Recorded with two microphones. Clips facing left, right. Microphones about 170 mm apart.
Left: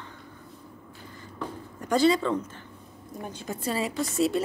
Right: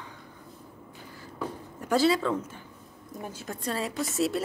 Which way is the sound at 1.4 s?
5° right (ahead or behind).